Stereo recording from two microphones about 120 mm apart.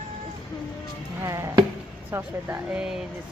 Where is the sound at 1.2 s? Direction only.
30° right (ahead or behind).